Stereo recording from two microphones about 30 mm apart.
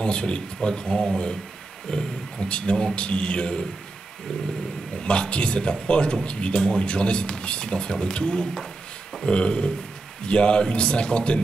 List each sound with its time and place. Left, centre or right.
0.0 s speech: left
5.0 s speech: left